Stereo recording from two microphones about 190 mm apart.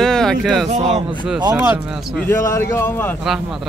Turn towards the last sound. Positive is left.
turn(degrees=0)  # may be behind; listen again after turning